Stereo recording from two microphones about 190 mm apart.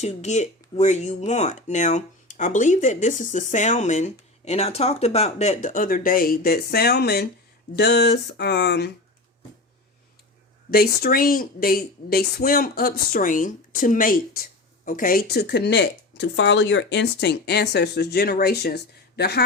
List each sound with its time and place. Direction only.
0.0 s a woman's voice: 35° left (ahead or behind); by 8.9 s 60° left (ahead or behind)
10.7 s a woman's voice: 50° left (ahead or behind)